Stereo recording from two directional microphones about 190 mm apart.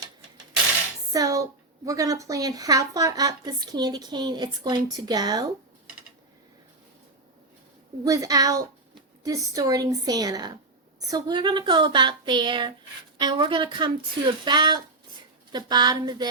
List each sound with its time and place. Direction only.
1.1 s a woman's voice: 20° right (ahead or behind)
8.0 s a woman's voice: 20° right (ahead or behind)